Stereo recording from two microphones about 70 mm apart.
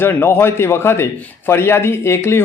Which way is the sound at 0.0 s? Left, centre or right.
Left.